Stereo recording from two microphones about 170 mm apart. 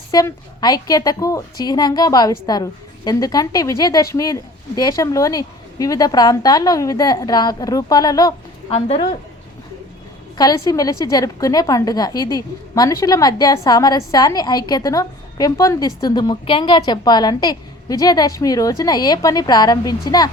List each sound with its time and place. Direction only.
0.1 s a woman's voice: 20° left (ahead or behind)
8.7 s a woman's voice: 35° left (ahead or behind)
10.3 s a woman's voice: 20° left (ahead or behind)